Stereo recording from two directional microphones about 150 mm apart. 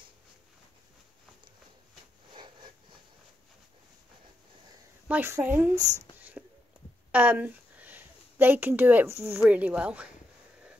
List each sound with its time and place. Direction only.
2.3 s a sound: 30° right (ahead or behind)
5.0 s speech: 10° right (ahead or behind)
6.1 s whispering: 10° right (ahead or behind)
7.1 s speech: 10° right (ahead or behind)